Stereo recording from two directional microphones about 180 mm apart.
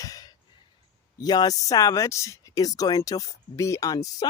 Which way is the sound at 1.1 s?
20° left (ahead or behind).